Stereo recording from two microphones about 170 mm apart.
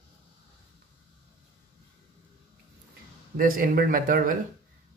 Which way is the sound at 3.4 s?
55° right (ahead or behind).